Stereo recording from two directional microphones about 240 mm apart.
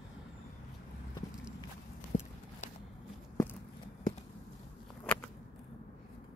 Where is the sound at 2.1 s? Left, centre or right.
Left.